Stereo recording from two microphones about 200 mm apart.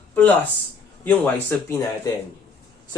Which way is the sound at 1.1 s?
10° left (ahead or behind).